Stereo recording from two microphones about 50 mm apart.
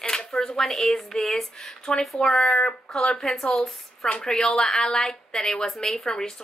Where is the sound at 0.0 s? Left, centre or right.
Centre.